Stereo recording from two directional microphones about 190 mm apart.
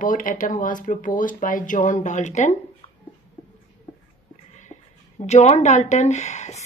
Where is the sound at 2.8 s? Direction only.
30° left (ahead or behind).